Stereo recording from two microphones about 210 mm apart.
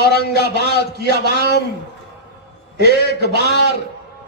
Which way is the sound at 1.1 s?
50° right (ahead or behind).